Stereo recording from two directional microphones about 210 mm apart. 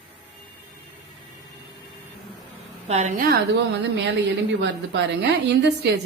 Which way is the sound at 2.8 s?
35° right (ahead or behind).